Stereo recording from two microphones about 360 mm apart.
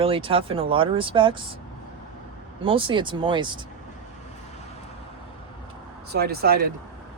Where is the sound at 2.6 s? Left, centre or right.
Centre.